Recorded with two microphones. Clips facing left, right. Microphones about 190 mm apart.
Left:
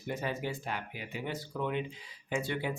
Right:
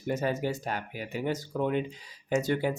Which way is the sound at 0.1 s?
45° right (ahead or behind).